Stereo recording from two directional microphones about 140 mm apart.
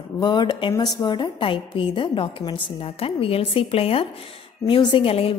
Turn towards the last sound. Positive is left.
turn(degrees=40)  # may be behind; listen again after turning